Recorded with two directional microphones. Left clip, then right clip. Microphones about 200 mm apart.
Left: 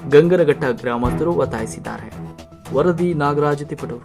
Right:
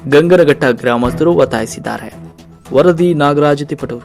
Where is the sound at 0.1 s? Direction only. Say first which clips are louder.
Right 5 dB; 20° right (ahead or behind).